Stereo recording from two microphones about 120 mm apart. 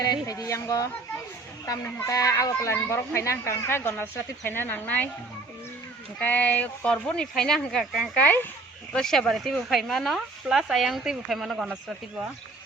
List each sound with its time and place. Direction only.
0.0 s speech: 30° left (ahead or behind); by 5.0 s 15° left (ahead or behind)
6.1 s speech: 15° left (ahead or behind); by 11.7 s centre (ahead or behind)